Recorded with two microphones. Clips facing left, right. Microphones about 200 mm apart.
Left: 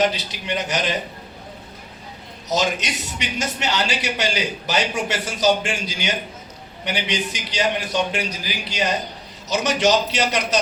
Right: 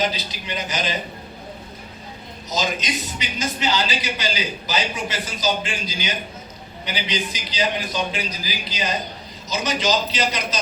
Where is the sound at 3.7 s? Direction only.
70° left (ahead or behind).